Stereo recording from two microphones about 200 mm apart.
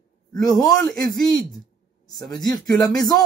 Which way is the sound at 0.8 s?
20° left (ahead or behind).